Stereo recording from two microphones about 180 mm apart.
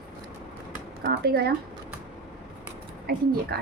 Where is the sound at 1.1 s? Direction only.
60° right (ahead or behind).